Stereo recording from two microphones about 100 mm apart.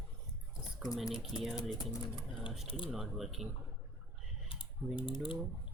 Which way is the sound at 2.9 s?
Centre (ahead or behind).